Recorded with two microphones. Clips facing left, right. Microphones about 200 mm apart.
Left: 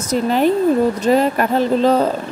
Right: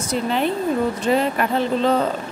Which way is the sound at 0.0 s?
40° left (ahead or behind).